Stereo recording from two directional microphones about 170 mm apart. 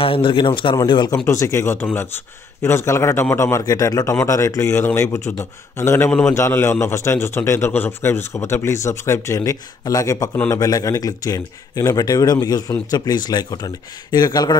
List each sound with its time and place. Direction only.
0.0 s speech: 30° left (ahead or behind)